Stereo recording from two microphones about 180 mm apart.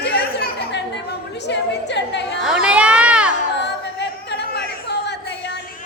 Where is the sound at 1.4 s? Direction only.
75° left (ahead or behind).